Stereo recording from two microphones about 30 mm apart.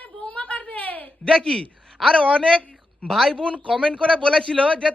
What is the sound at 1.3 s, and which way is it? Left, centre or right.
Speech, left.